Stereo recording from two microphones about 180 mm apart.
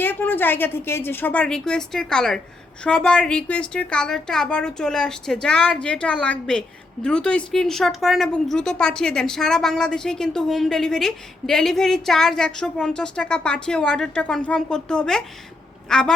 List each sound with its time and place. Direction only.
0.0 s a woman's voice: 10° left (ahead or behind)